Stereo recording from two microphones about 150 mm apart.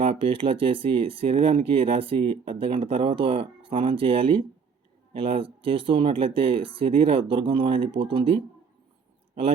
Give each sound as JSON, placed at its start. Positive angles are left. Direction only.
{"t": 0.0, "sound": "speech", "side_deg": -35}